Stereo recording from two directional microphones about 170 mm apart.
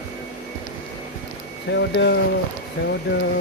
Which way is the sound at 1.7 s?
90° left.